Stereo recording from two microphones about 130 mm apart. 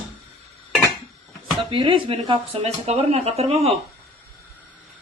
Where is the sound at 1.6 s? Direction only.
40° right (ahead or behind).